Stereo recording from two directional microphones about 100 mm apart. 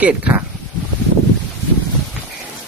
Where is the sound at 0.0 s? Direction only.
15° right (ahead or behind).